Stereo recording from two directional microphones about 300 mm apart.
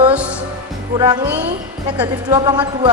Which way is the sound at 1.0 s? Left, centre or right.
Centre.